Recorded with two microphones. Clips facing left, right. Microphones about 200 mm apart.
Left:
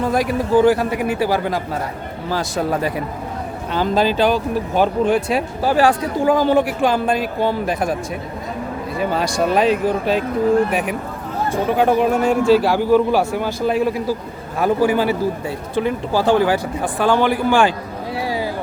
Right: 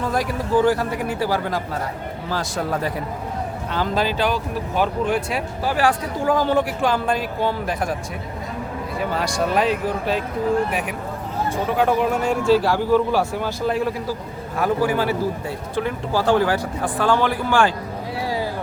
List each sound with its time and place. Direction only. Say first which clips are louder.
0.1 s a man's voice: left 4 dB; 20° left (ahead or behind)
3.7 s a man's voice: left 5 dB; 20° left (ahead or behind)
6.2 s a man's voice: left 4 dB; 15° left (ahead or behind)
9.4 s a man's voice: left 4 dB; 20° left (ahead or behind)
11.8 s a man's voice: left 4 dB; 20° left (ahead or behind)